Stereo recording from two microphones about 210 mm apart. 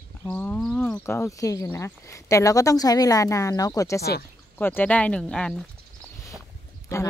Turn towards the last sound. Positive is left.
turn(degrees=15)  # may be behind; listen again after turning